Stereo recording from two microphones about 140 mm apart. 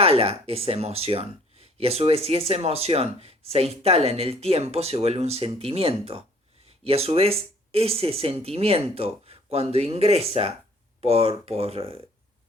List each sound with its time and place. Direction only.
0.0 s speech: 45° right (ahead or behind)